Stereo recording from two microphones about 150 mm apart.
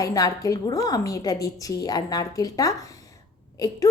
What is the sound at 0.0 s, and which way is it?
A woman's voice, 25° left (ahead or behind).